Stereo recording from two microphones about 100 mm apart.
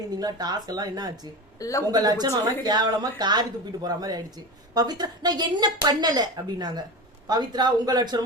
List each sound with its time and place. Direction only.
0.2 s speech: 40° right (ahead or behind)
1.5 s speech: 35° left (ahead or behind)
1.9 s speech: 40° right (ahead or behind)